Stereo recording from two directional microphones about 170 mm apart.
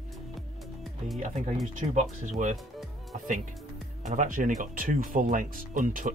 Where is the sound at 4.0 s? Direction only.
45° right (ahead or behind).